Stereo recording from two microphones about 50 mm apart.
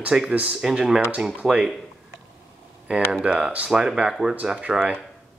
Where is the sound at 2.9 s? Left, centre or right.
Right.